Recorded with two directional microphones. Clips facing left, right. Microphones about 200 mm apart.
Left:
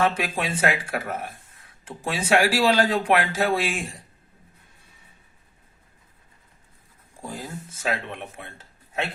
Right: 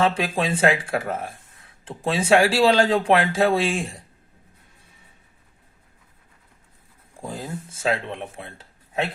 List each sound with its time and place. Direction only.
0.0 s speech: 30° right (ahead or behind)
7.3 s speech: 30° right (ahead or behind)